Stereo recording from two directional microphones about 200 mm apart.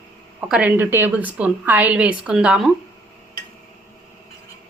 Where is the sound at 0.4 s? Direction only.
5° right (ahead or behind).